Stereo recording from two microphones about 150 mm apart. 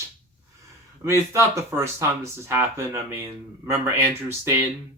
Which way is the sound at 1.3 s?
20° right (ahead or behind).